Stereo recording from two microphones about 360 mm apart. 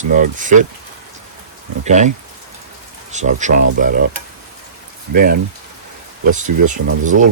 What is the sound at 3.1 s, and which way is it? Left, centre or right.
Speech, centre.